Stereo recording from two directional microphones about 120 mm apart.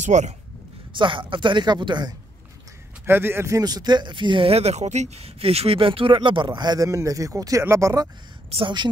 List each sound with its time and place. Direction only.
0.0 s speech: 85° right
0.9 s speech: 45° right (ahead or behind)
3.1 s speech: 20° right (ahead or behind)
8.5 s speech: 45° right (ahead or behind)